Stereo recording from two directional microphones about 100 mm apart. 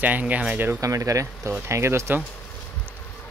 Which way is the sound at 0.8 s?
35° right (ahead or behind).